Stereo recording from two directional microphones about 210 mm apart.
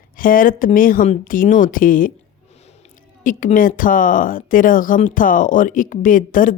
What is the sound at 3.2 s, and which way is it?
Speech, 40° left (ahead or behind).